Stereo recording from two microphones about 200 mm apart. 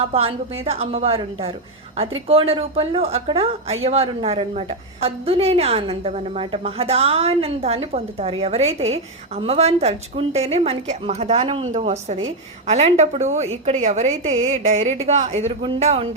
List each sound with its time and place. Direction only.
0.0 s a woman's voice: 30° right (ahead or behind)